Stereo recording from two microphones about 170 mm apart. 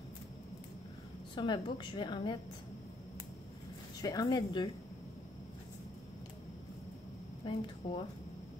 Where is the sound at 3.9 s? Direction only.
20° left (ahead or behind).